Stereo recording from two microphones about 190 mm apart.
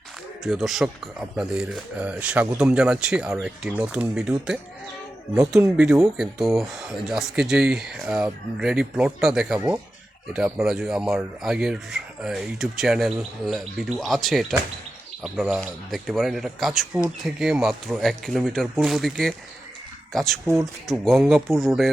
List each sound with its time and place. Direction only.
0.4 s speech: centre (ahead or behind)
9.6 s speech: 20° right (ahead or behind)
10.3 s speech: 5° right (ahead or behind)
20.8 s speech: centre (ahead or behind)